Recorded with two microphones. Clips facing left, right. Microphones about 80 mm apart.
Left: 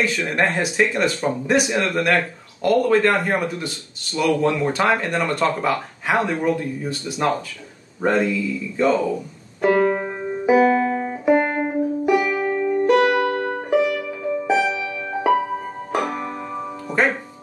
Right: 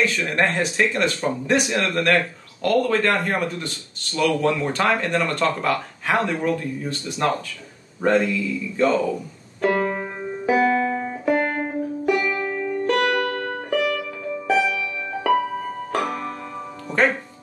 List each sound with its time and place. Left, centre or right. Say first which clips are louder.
0.0 s speech: even; centre
9.6 s music: left 4 dB; centre